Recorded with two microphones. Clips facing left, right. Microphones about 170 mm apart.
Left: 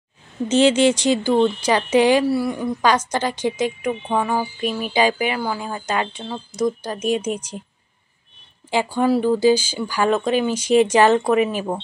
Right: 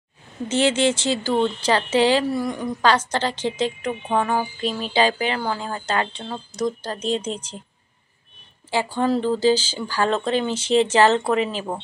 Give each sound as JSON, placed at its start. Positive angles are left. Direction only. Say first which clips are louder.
{"t": 0.5, "sound": "speech", "louder": "left 4 dB", "side_deg": 20}
{"t": 8.6, "sound": "speech", "louder": "left 3 dB", "side_deg": 15}